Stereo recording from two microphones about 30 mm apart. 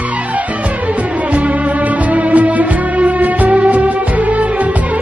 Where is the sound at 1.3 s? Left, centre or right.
Right.